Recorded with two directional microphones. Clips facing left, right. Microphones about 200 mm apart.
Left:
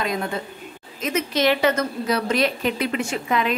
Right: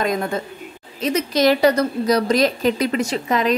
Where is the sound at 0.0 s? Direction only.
45° right (ahead or behind).